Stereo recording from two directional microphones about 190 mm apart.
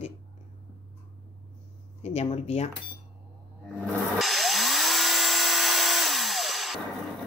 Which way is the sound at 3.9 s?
Centre (ahead or behind).